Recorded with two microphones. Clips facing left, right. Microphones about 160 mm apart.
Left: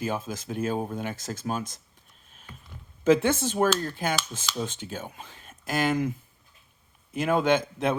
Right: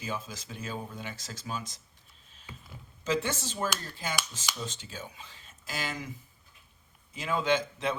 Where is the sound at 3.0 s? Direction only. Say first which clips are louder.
Left 10 dB; 55° left (ahead or behind).